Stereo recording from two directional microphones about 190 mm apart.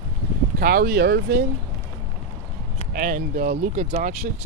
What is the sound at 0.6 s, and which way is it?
Speech, 50° right (ahead or behind).